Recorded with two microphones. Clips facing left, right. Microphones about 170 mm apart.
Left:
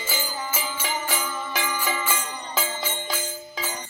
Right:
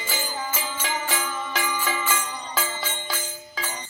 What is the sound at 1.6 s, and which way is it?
Jingle bell, centre (ahead or behind).